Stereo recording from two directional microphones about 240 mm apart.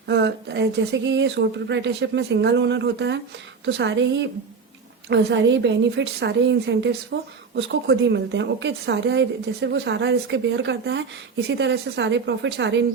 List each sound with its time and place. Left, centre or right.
0.1 s a woman's voice: right